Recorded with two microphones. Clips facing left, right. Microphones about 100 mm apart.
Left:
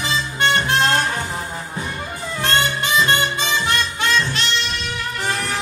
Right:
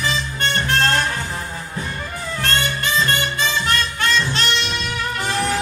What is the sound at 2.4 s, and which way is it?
Music, 20° left (ahead or behind).